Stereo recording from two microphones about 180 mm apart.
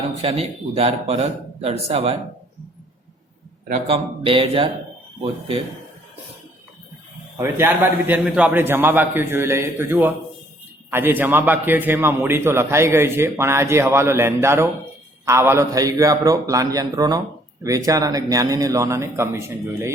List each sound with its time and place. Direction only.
0.2 s a man's voice: 35° right (ahead or behind)
3.7 s a man's voice: 35° right (ahead or behind)
7.3 s a man's voice: 10° right (ahead or behind)